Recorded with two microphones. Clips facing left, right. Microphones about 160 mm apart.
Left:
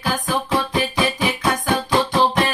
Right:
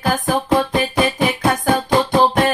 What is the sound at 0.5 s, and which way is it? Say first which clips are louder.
Music: right 4 dB; 55° right (ahead or behind).